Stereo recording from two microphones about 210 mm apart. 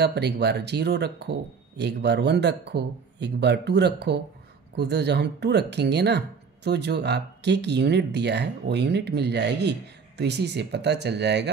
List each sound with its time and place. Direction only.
0.0 s speech: 50° right (ahead or behind)